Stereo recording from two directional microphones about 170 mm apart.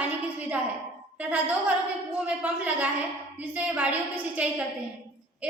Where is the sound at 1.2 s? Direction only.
5° right (ahead or behind).